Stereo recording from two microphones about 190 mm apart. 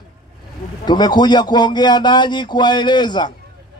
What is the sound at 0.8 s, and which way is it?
A man's voice, 20° left (ahead or behind).